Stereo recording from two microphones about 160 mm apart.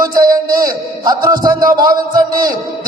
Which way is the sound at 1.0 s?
25° right (ahead or behind).